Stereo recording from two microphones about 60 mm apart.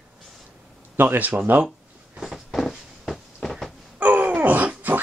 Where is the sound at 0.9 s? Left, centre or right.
Right.